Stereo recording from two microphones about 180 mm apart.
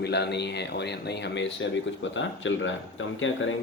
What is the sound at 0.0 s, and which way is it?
Speech, 70° left (ahead or behind).